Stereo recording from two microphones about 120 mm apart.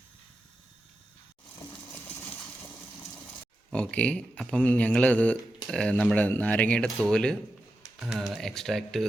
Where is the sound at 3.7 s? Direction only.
10° left (ahead or behind).